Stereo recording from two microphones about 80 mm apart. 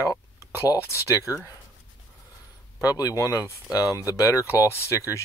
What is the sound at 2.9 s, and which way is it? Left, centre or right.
Speech, left.